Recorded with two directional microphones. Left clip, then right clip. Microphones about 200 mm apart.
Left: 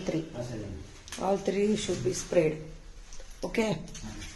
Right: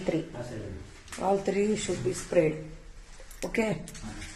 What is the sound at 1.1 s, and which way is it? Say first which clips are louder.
Speech: right 2 dB; centre (ahead or behind).